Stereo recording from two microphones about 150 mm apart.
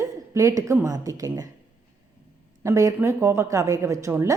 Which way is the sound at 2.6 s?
20° right (ahead or behind).